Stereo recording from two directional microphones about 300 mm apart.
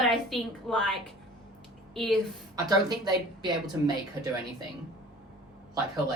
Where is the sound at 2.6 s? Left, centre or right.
Centre.